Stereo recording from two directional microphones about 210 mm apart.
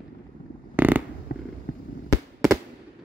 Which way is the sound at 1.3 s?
50° left (ahead or behind).